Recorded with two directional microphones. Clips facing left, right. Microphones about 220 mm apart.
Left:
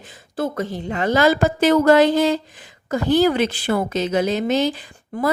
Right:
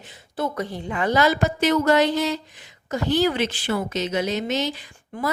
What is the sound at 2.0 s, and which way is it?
Speech, 90° left.